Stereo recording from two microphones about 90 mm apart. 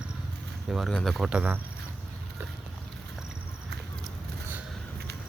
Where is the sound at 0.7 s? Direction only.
5° right (ahead or behind).